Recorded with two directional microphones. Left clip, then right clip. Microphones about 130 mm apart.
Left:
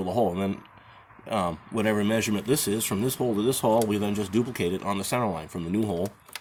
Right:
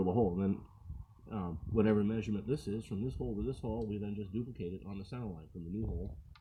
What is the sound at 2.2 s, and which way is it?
Speech, 35° left (ahead or behind).